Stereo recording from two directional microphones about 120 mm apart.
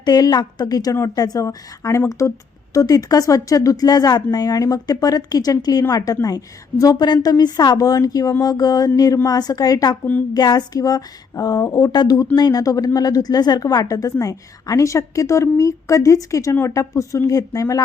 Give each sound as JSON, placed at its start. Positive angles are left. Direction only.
{"t": 0.0, "sound": "a woman's voice", "side_deg": 35}